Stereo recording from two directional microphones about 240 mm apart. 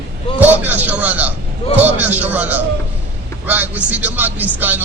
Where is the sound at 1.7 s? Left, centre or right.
Centre.